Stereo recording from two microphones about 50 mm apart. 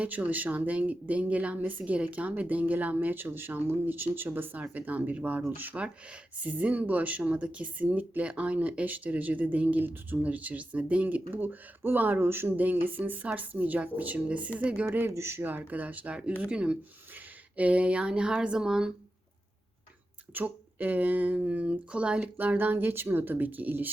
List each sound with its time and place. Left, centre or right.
0.0 s speech: right
11.3 s speech: right
12.2 s speech: right
12.5 s speech: right
14.8 s speech: right
15.1 s speech: right
15.4 s speech: right; by 18.9 s centre
20.3 s speech: right
22.2 s speech: right